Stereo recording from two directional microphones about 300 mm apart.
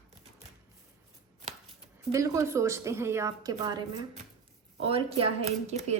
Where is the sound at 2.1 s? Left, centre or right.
Centre.